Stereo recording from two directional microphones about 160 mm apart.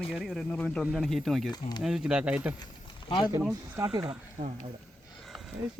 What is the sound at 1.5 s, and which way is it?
Speech, 25° left (ahead or behind).